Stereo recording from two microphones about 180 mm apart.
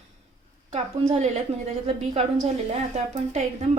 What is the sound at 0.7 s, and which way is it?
Speech, 40° right (ahead or behind).